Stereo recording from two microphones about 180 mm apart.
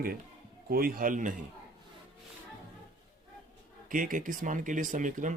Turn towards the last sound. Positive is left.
turn(degrees=-45)  # may be behind; listen again after turning